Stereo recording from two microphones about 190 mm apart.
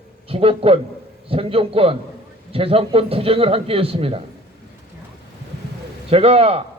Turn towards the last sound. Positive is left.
turn(degrees=-30)  # may be behind; listen again after turning